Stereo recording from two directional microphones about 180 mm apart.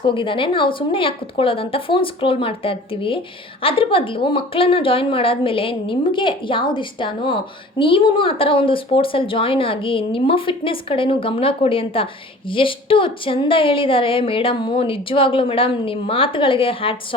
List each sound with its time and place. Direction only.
0.0 s a woman's voice: 30° left (ahead or behind)